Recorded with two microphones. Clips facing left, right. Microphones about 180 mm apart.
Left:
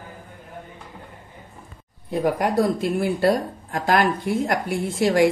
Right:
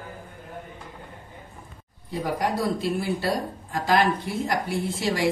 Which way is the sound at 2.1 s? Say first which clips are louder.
Left 5 dB; 55° left (ahead or behind).